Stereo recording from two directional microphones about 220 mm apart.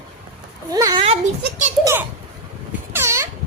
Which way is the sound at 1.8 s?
10° right (ahead or behind).